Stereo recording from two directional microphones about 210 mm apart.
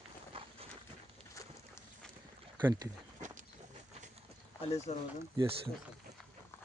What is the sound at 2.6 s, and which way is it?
Speech, 15° right (ahead or behind).